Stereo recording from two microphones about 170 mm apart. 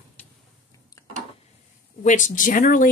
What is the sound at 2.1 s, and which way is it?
Speech, 50° left (ahead or behind).